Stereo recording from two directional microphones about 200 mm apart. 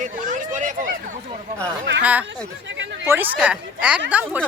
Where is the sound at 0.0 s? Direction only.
40° right (ahead or behind).